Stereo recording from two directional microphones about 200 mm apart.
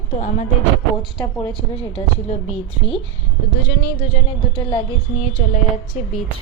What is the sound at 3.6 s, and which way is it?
Speech, 50° left (ahead or behind).